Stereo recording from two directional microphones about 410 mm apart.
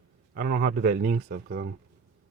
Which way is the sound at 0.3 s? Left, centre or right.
Right.